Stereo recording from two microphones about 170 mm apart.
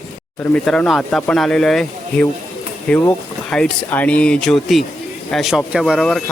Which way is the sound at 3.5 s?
5° left (ahead or behind).